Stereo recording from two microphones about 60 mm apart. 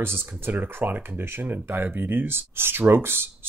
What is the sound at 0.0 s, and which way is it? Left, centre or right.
Speech, right.